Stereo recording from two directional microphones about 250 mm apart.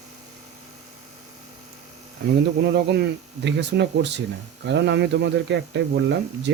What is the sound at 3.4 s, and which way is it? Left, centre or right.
Speech, right.